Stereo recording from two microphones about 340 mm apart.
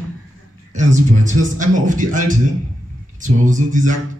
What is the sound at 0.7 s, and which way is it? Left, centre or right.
A man's voice, right.